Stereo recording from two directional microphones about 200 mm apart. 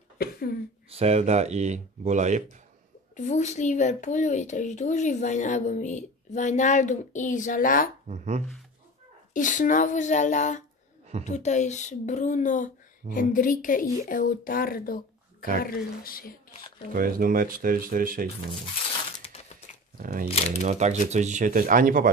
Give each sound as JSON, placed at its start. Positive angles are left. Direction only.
{"t": 0.2, "sound": "speech", "side_deg": 50}
{"t": 0.8, "sound": "speech", "side_deg": -30}
{"t": 3.2, "sound": "speech", "side_deg": 35}
{"t": 8.1, "sound": "speech", "side_deg": -35}
{"t": 9.3, "sound": "speech", "side_deg": 40}
{"t": 16.9, "sound": "speech", "side_deg": -45}
{"t": 19.1, "sound": "a sound", "side_deg": 30}
{"t": 20.0, "sound": "speech", "side_deg": -45}